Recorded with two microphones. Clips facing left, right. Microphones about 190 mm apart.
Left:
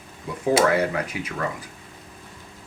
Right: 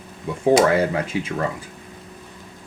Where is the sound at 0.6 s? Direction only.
30° right (ahead or behind).